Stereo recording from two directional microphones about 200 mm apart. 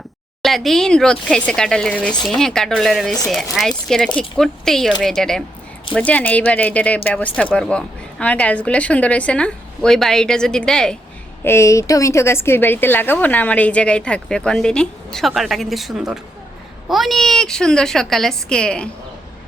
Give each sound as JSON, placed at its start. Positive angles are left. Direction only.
{"t": 0.4, "sound": "speech", "side_deg": 0}
{"t": 11.4, "sound": "speech", "side_deg": 15}